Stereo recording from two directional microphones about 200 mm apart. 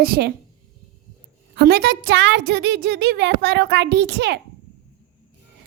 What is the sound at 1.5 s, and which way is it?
A woman's voice, 55° right (ahead or behind).